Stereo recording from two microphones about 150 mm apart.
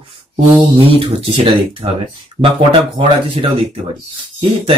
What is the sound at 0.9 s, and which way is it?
Speech, 40° right (ahead or behind).